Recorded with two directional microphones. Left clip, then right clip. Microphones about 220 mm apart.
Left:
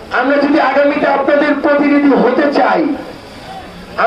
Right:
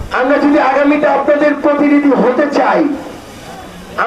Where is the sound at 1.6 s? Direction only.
45° left (ahead or behind).